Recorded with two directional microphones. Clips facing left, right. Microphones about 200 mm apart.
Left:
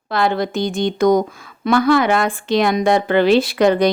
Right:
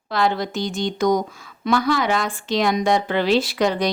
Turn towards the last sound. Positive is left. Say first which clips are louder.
# left 6 dB
turn(degrees=55)  # may be behind; listen again after turning